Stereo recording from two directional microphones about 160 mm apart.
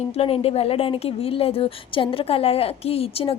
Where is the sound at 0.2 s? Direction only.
40° left (ahead or behind).